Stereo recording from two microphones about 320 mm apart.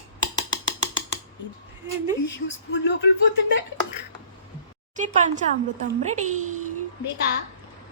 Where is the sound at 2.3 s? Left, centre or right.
Left.